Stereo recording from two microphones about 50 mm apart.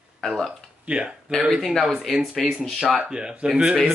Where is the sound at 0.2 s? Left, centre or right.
Centre.